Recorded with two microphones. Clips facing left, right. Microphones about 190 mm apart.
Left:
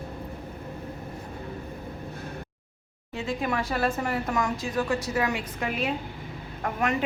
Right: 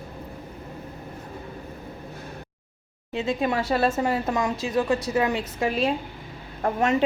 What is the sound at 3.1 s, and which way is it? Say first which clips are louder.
A woman's voice: right 4 dB; 20° right (ahead or behind).